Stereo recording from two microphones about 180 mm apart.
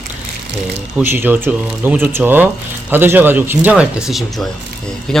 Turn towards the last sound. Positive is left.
turn(degrees=0)  # may be behind; listen again after turning